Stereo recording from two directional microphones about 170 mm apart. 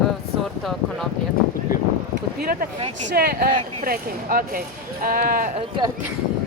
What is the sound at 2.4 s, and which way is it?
Speech, 60° right (ahead or behind).